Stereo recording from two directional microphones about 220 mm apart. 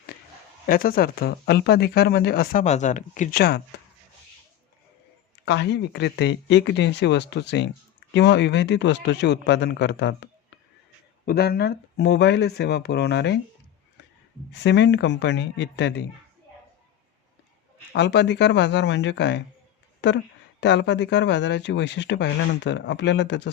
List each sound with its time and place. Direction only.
0.7 s speech: 40° left (ahead or behind)
3.7 s a sound: 50° left (ahead or behind)
5.5 s speech: 50° left (ahead or behind)
11.3 s speech: 45° left (ahead or behind)
14.5 s speech: 55° left (ahead or behind)
17.9 s speech: 50° left (ahead or behind)